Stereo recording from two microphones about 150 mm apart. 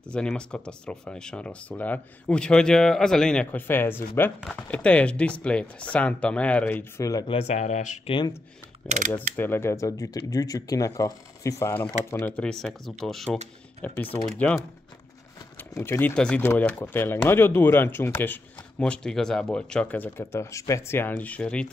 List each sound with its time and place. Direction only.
0.0 s speech: 5° left (ahead or behind); by 7.2 s 20° left (ahead or behind)
7.2 s speech: 40° left (ahead or behind)
8.8 s speech: 55° right (ahead or behind)
9.1 s speech: 15° left (ahead or behind)
15.5 s speech: 15° left (ahead or behind)